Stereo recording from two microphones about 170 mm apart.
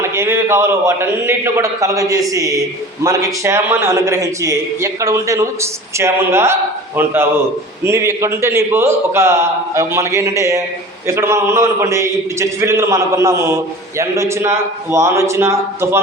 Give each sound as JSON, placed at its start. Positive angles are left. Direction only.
{"t": 0.0, "sound": "a man's voice", "side_deg": -15}